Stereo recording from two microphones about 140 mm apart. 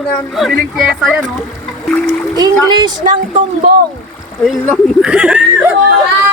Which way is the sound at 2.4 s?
30° right (ahead or behind).